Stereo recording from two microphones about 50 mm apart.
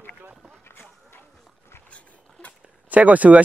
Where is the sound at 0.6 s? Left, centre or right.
Left.